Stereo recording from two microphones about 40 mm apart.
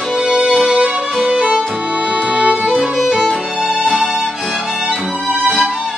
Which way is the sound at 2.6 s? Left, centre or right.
Centre.